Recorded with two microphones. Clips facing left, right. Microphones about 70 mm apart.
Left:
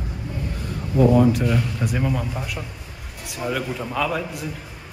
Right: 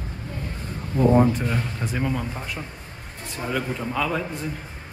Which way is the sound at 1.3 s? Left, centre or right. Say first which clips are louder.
Left 4 dB; centre.